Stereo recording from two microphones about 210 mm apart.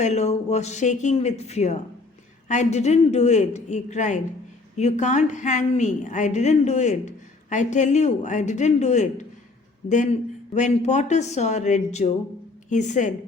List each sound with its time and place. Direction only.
0.0 s a woman's voice: 30° left (ahead or behind)